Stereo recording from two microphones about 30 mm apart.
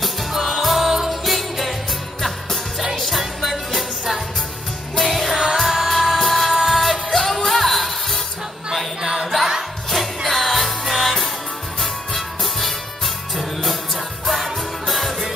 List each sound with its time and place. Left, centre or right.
0.3 s music: centre
3.0 s music: centre
4.9 s music: centre
6.5 s music: centre
6.8 s music: centre
9.0 s music: centre
9.8 s music: centre